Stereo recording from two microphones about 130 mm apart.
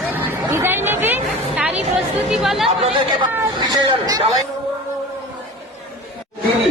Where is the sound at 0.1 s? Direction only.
15° right (ahead or behind).